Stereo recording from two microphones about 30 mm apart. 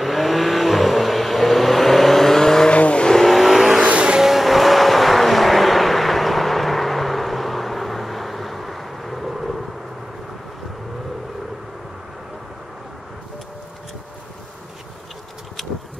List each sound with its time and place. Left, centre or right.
0.0 s vehicle: centre
2.7 s vehicle: left
3.3 s vehicle: centre